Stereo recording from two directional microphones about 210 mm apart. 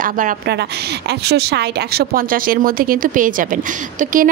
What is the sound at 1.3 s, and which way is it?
A woman's voice, 50° right (ahead or behind).